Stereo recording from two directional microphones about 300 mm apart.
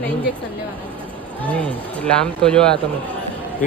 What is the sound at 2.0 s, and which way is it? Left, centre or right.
Speech, centre.